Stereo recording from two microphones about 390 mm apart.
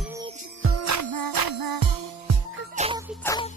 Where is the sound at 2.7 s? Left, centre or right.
Centre.